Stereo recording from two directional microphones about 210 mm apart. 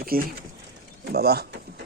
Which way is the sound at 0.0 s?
45° right (ahead or behind).